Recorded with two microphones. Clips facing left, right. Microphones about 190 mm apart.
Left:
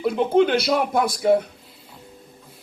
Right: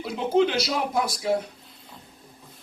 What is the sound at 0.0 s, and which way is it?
Speech, 55° left (ahead or behind).